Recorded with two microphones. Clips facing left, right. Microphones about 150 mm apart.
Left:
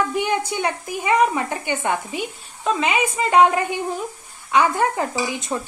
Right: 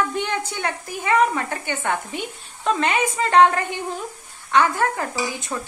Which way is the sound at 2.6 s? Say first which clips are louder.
Even; 5° left (ahead or behind).